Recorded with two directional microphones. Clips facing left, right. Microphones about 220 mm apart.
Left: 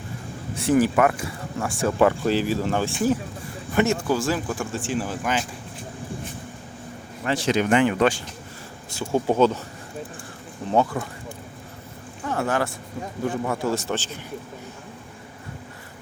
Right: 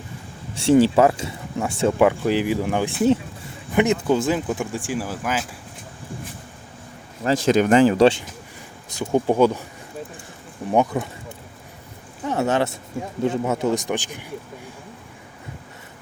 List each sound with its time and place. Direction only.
0.5 s speech: 30° right (ahead or behind); by 5.5 s 5° right (ahead or behind)
7.4 s speech: 45° right (ahead or behind)
8.9 s speech: 15° right (ahead or behind)
10.7 s speech: 15° right (ahead or behind)
12.2 s speech: 20° right (ahead or behind)